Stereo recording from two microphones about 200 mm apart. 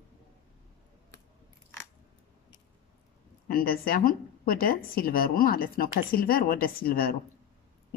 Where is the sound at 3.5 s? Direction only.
50° left (ahead or behind).